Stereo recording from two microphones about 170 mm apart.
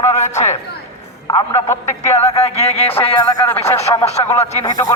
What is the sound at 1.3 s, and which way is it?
Speech, 20° left (ahead or behind).